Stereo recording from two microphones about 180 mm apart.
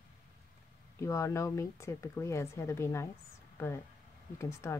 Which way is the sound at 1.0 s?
15° left (ahead or behind).